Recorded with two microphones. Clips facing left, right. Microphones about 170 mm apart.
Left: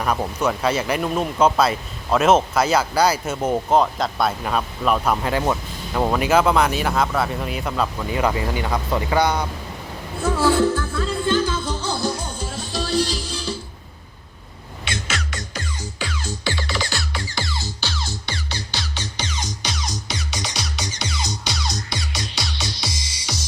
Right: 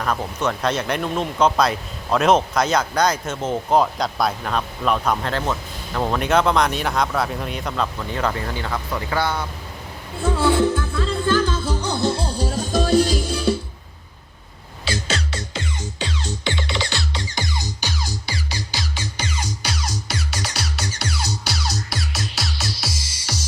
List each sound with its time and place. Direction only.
0.0 s speech: 10° left (ahead or behind)
10.3 s speech: 25° right (ahead or behind)
10.8 s speech: 5° left (ahead or behind)
11.6 s music: 15° right (ahead or behind); by 13.6 s 55° right (ahead or behind)
14.8 s music: 35° right (ahead or behind); by 23.4 s 5° right (ahead or behind)